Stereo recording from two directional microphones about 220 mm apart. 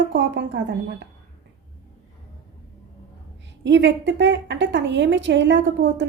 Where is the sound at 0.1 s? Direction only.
55° right (ahead or behind).